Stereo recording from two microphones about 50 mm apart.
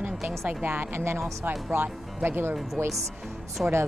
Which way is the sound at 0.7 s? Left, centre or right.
Right.